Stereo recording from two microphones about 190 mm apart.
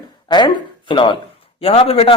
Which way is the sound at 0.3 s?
25° left (ahead or behind).